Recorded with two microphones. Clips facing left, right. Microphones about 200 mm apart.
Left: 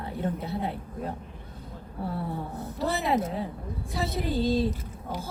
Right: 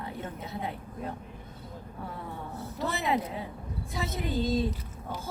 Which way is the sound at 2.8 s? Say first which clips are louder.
Left 3 dB; 35° left (ahead or behind).